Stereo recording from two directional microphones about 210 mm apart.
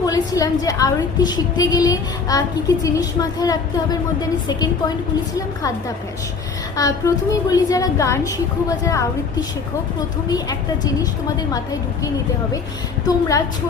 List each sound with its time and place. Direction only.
0.0 s a woman's voice: 15° left (ahead or behind)
6.7 s a woman's voice: 15° left (ahead or behind)
10.2 s a woman's voice: 15° left (ahead or behind)
13.1 s a woman's voice: 15° left (ahead or behind)